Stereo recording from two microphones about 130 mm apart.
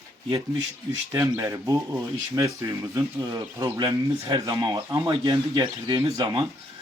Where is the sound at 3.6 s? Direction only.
30° right (ahead or behind).